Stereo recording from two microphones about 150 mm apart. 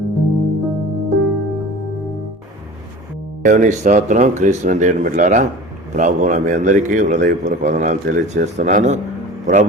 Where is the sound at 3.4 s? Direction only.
55° right (ahead or behind).